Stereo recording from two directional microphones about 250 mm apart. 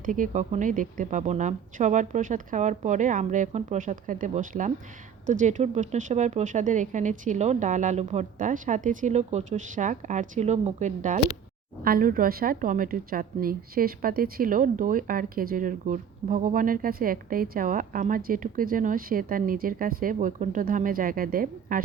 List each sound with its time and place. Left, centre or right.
0.0 s a woman's voice: right